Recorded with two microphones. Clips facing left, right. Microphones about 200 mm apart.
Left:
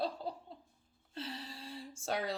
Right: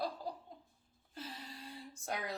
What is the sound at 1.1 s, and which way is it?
Speech, 30° left (ahead or behind).